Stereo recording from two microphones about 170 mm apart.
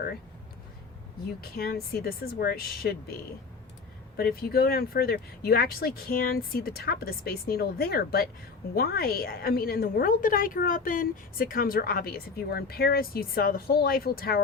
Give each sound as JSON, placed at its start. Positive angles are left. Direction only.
{"t": 1.4, "sound": "a woman's voice", "side_deg": 65}
{"t": 4.2, "sound": "a woman's voice", "side_deg": 65}